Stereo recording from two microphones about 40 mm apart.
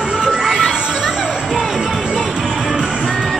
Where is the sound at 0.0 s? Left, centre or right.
Centre.